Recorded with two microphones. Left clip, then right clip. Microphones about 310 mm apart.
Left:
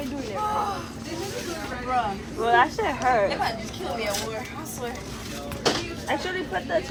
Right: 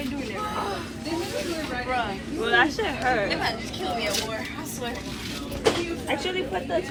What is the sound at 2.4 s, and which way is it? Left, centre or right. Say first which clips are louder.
Speech: left 2 dB; centre.